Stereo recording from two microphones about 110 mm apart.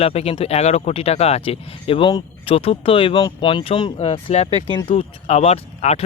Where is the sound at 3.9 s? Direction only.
65° left (ahead or behind).